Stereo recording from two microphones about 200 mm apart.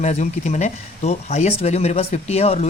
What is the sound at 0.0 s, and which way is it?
Speech, 35° left (ahead or behind).